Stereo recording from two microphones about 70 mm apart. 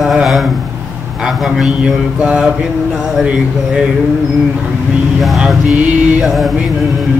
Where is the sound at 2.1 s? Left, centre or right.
Centre.